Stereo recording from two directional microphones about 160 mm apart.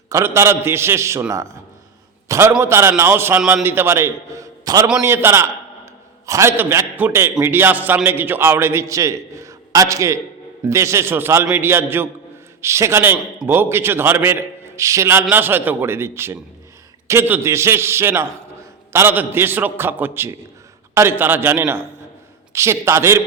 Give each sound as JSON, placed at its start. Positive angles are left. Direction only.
{"t": 0.1, "sound": "a man's voice", "side_deg": -15}